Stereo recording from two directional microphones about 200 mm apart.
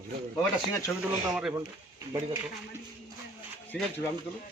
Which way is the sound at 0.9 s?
5° left (ahead or behind).